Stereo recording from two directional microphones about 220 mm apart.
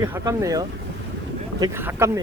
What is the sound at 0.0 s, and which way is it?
Speech, 15° right (ahead or behind).